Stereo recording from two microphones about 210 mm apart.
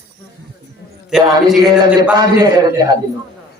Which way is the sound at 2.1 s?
20° right (ahead or behind).